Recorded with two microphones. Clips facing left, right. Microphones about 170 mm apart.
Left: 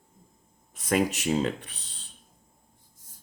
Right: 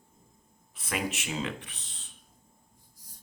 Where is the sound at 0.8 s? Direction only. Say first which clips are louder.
Left 9 dB; 40° left (ahead or behind).